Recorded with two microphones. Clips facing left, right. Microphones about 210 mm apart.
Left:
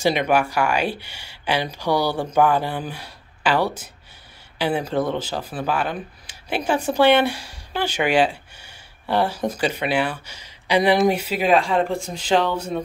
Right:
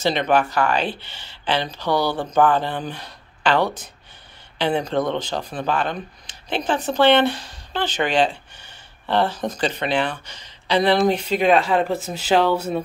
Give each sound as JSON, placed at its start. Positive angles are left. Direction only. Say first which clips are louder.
{"t": 0.0, "sound": "speech", "louder": "even", "side_deg": 10}